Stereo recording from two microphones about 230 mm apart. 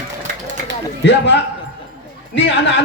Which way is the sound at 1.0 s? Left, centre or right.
Left.